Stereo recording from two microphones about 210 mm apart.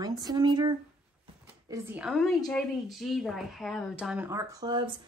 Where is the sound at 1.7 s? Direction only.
5° right (ahead or behind).